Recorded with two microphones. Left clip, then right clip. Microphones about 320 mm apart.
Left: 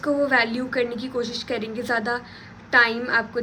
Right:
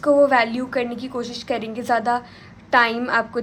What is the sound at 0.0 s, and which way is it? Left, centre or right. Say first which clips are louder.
A woman's voice: right 5 dB; centre.